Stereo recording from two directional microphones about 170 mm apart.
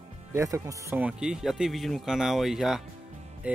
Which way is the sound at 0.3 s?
20° right (ahead or behind).